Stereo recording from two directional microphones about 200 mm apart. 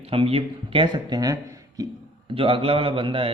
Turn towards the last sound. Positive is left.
turn(degrees=-25)  # may be behind; listen again after turning